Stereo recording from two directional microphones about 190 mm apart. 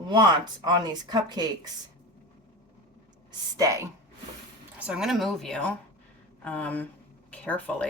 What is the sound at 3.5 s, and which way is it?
Speech, 15° right (ahead or behind).